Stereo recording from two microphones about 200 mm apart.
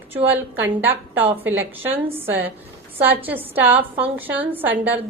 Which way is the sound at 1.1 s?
30° right (ahead or behind).